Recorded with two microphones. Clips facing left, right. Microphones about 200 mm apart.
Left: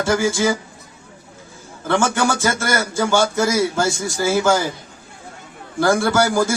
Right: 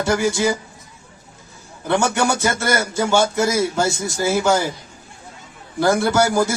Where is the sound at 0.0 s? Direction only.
20° right (ahead or behind).